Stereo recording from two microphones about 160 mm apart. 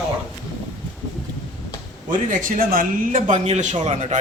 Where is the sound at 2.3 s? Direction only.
55° right (ahead or behind).